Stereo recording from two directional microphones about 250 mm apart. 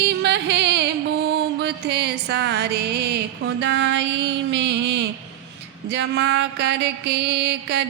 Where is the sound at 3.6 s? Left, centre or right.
Right.